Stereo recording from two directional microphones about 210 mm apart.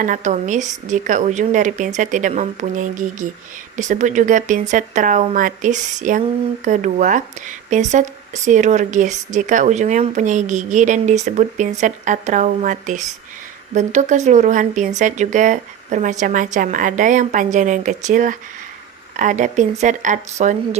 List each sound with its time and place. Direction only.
0.0 s speech: 35° right (ahead or behind)